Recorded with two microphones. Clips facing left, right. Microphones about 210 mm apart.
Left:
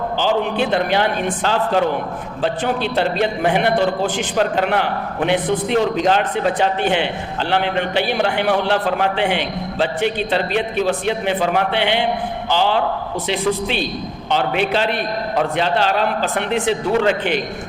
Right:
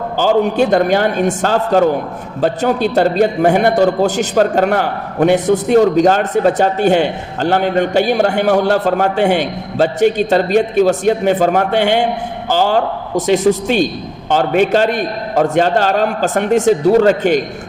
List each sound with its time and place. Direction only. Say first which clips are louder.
0.2 s a man's voice: right 7 dB; 45° right (ahead or behind)